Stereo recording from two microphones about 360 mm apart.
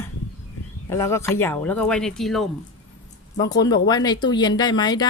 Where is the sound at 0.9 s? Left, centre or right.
Centre.